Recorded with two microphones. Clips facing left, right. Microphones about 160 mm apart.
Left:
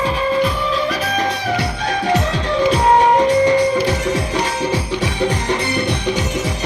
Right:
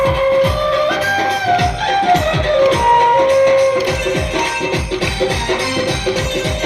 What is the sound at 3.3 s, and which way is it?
Music, 75° right (ahead or behind).